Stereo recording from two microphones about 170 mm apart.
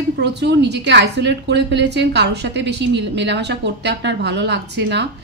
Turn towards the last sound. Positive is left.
turn(degrees=-90)